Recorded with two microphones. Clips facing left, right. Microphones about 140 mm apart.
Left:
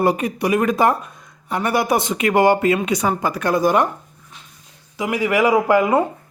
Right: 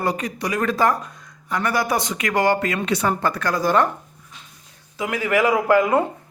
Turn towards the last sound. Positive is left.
turn(degrees=10)  # may be behind; listen again after turning